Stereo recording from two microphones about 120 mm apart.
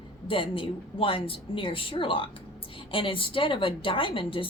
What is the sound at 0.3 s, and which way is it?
A woman's voice, 50° left (ahead or behind).